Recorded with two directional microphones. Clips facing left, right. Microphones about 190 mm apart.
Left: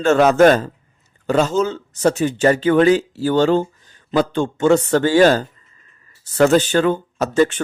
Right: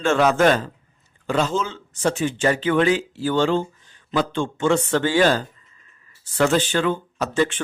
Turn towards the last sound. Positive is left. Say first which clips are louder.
# left 5 dB
turn(degrees=40)  # may be behind; listen again after turning